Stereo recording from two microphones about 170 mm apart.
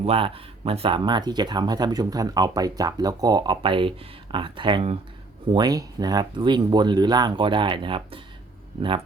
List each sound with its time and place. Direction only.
0.0 s speech: 35° right (ahead or behind)